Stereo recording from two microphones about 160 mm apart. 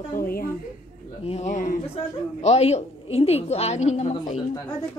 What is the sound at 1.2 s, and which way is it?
A woman's voice, 40° left (ahead or behind).